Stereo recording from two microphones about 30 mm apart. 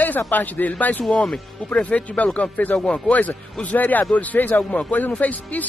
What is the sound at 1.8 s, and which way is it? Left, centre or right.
Speech, left.